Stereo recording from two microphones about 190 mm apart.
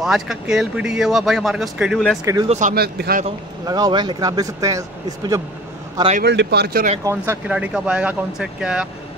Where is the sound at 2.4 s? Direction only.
35° right (ahead or behind).